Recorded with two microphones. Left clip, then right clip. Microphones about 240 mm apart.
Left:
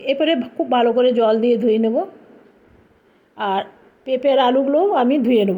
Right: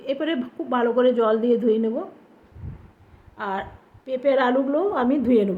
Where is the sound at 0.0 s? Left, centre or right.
Centre.